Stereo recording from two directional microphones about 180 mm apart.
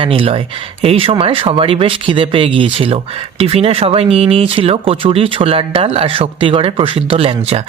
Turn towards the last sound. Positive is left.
turn(degrees=-30)  # may be behind; listen again after turning